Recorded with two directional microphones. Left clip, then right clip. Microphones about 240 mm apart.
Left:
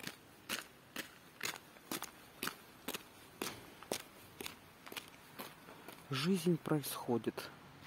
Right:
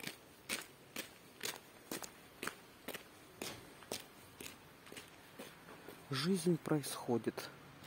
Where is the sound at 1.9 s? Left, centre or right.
Left.